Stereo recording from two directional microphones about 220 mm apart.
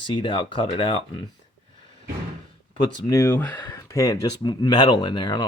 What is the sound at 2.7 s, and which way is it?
Speech, 15° left (ahead or behind).